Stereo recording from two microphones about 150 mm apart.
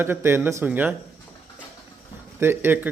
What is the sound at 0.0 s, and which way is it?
Speech, 15° right (ahead or behind).